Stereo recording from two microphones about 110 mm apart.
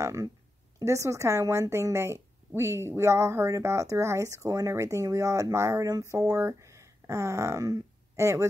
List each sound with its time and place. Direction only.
0.0 s speech: 30° right (ahead or behind)